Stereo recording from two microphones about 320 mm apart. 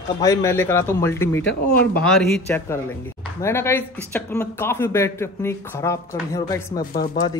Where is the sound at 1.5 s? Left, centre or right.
Left.